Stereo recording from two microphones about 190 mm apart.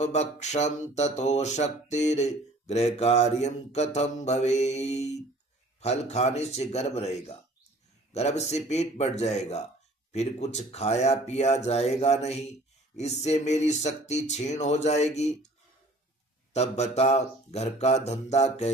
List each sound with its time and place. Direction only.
0.0 s speech: 35° left (ahead or behind)
16.5 s speech: 35° left (ahead or behind)